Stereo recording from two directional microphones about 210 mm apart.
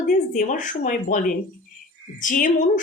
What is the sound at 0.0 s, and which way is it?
Speech, 40° left (ahead or behind).